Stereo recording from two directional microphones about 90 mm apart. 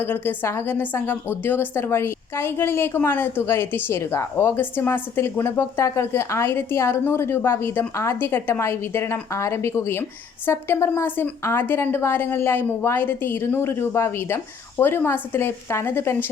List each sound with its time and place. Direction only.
0.0 s a woman's voice: 25° left (ahead or behind)